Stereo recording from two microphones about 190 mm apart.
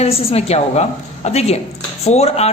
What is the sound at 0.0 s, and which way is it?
A man's voice, 30° left (ahead or behind).